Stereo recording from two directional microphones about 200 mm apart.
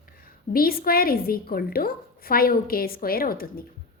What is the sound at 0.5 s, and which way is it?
A woman's voice, 50° left (ahead or behind).